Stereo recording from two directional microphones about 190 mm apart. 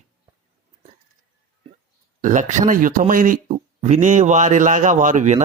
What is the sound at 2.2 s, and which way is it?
A man's voice, 40° right (ahead or behind).